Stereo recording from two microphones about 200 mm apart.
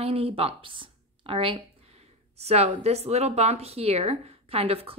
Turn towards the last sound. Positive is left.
turn(degrees=-30)  # may be behind; listen again after turning